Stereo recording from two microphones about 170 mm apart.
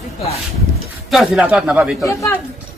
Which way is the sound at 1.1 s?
Centre (ahead or behind).